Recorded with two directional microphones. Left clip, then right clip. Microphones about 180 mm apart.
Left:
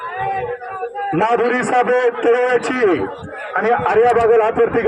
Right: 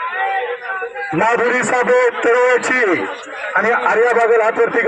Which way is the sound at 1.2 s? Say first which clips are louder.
Right 2 dB; 45° left (ahead or behind).